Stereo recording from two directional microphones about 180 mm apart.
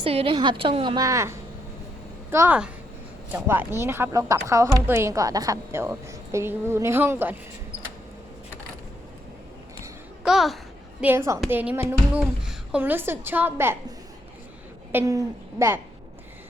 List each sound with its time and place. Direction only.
0.0 s a woman's voice: 30° right (ahead or behind); by 7.3 s 10° right (ahead or behind)
10.2 s a child's voice: centre (ahead or behind)
11.0 s speech: 15° right (ahead or behind)
14.9 s speech: 15° right (ahead or behind)